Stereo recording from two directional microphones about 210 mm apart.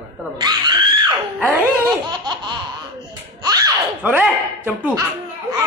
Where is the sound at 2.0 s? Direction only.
20° right (ahead or behind).